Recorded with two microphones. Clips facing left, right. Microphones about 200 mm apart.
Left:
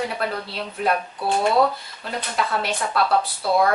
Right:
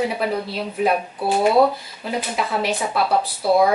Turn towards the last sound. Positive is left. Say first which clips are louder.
# right 3 dB
turn(degrees=-15)  # may be behind; listen again after turning